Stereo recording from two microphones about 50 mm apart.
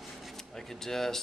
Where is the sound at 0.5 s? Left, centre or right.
Centre.